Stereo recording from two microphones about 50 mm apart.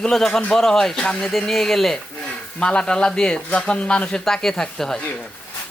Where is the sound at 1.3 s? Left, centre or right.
Centre.